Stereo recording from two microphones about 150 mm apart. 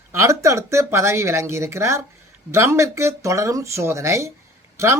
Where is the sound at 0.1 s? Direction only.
20° right (ahead or behind).